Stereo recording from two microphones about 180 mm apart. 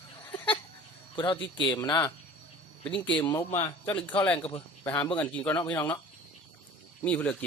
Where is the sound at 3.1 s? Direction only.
15° left (ahead or behind).